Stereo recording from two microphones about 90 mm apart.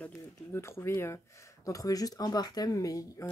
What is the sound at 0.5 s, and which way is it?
Speech, 30° left (ahead or behind).